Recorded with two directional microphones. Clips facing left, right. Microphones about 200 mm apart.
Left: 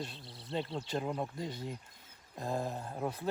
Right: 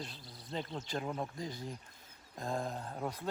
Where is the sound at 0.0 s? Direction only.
25° left (ahead or behind).